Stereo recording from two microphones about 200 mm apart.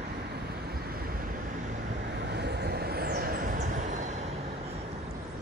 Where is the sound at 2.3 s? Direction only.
55° right (ahead or behind); by 4.1 s 35° right (ahead or behind).